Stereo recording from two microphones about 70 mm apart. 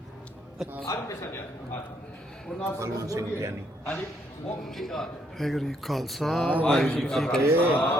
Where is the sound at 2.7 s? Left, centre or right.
Right.